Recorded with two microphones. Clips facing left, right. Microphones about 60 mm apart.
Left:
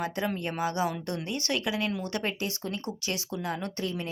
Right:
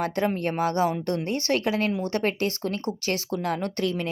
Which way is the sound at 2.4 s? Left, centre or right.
Right.